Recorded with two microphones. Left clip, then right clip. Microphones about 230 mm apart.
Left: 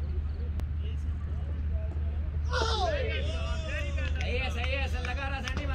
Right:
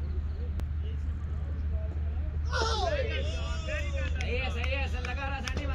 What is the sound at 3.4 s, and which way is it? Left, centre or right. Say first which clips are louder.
Vehicle: even; right.